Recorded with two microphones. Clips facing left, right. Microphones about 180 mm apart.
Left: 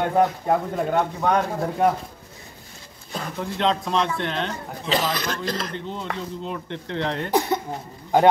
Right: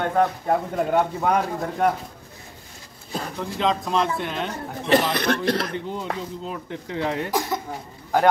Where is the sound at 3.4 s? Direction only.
Centre (ahead or behind).